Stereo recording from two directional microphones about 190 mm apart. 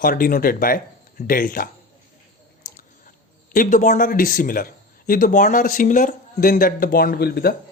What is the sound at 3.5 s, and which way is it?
Speech, 45° left (ahead or behind).